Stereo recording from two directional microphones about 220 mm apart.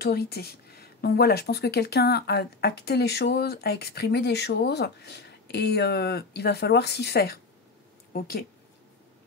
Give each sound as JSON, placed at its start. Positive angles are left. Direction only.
{"t": 0.0, "sound": "speech", "side_deg": 45}